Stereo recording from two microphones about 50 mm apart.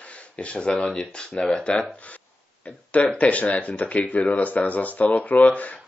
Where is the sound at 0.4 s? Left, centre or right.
Left.